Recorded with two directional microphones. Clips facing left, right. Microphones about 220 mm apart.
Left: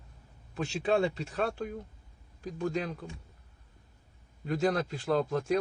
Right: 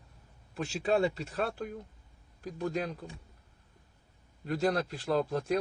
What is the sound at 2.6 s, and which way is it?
Speech, 40° right (ahead or behind).